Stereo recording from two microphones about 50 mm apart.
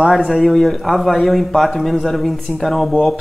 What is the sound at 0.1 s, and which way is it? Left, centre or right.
Speech, centre.